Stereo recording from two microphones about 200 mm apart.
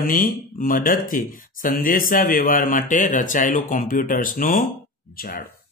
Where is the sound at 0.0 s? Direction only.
45° left (ahead or behind).